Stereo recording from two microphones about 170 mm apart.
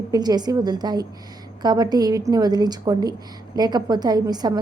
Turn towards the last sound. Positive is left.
turn(degrees=-25)  # may be behind; listen again after turning